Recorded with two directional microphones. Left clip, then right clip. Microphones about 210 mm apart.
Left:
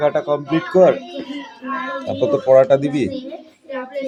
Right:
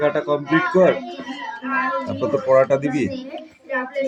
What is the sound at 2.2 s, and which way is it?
Speech, 15° left (ahead or behind).